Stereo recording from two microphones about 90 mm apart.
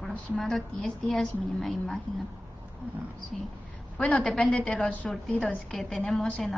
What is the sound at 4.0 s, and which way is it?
A woman's voice, 10° left (ahead or behind).